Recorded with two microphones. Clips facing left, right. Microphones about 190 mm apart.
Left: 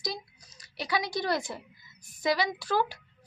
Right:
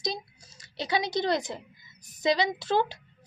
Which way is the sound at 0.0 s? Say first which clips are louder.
Right 3 dB; 25° right (ahead or behind).